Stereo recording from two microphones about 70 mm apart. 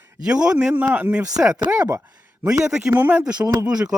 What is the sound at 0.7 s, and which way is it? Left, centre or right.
Speech, right.